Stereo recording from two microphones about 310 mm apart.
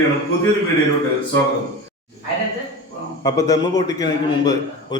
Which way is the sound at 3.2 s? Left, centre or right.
Centre.